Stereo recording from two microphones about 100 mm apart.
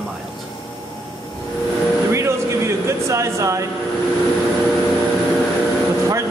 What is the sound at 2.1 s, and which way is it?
Music, 30° right (ahead or behind).